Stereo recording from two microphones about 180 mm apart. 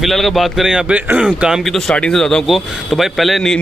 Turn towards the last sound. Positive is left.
turn(degrees=0)  # may be behind; listen again after turning